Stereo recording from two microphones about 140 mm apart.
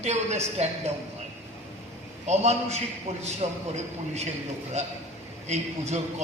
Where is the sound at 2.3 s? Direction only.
50° right (ahead or behind).